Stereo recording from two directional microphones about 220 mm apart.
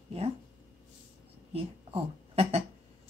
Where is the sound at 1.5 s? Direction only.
25° right (ahead or behind).